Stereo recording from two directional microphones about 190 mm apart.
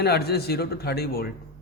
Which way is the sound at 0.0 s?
55° left (ahead or behind).